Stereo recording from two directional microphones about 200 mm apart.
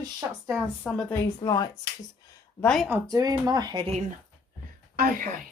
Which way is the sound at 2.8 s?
15° right (ahead or behind).